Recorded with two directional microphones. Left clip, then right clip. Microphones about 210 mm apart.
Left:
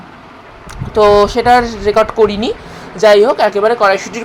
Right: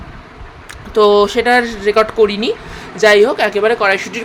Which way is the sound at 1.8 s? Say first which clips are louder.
Left 1 dB; centre (ahead or behind).